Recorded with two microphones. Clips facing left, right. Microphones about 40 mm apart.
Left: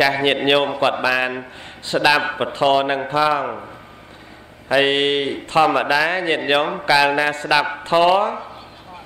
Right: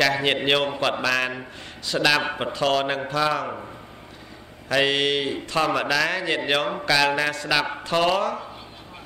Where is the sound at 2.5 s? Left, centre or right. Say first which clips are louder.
Left 6 dB; left.